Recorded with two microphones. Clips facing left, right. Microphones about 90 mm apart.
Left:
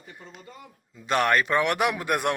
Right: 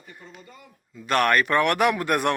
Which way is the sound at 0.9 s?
20° left (ahead or behind).